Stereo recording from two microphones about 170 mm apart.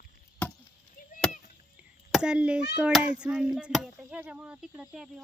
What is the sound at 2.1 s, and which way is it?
A child's voice, 5° right (ahead or behind).